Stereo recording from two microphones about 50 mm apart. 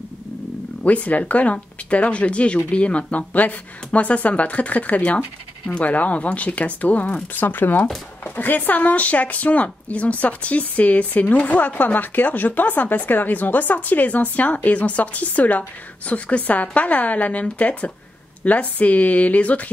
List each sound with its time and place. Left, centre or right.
0.8 s speech: left
7.3 s speech: left